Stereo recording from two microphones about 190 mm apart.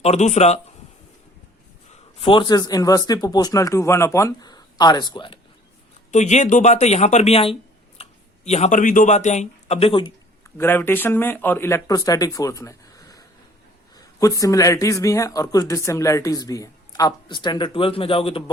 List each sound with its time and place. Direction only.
0.0 s speech: 35° left (ahead or behind)
1.9 s a man's voice: 30° left (ahead or behind)
6.1 s speech: 40° left (ahead or behind)
10.6 s speech: 10° left (ahead or behind); by 18.5 s 30° left (ahead or behind)